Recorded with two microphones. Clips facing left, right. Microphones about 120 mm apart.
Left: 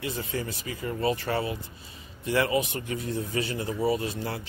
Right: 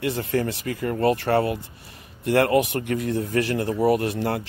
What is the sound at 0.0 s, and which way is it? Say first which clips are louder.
A man's voice: right 8 dB; 70° right (ahead or behind).